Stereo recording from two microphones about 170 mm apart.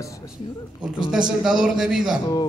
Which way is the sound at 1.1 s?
5° right (ahead or behind).